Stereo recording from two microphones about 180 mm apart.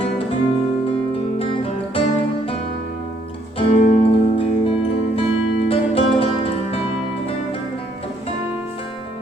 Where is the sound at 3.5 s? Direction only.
35° left (ahead or behind).